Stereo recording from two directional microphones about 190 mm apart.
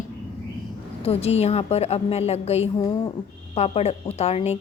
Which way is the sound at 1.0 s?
30° left (ahead or behind).